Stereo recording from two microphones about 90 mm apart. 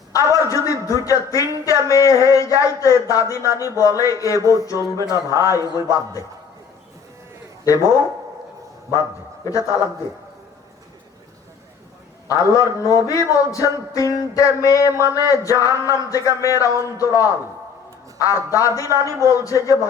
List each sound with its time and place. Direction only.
0.4 s a man's voice: 35° left (ahead or behind)
4.4 s a sound: 35° right (ahead or behind)
4.6 s a man's voice: 35° left (ahead or behind)
7.6 s a man's voice: 40° left (ahead or behind)
9.4 s a man's voice: 40° left (ahead or behind)
12.3 s a man's voice: 40° left (ahead or behind)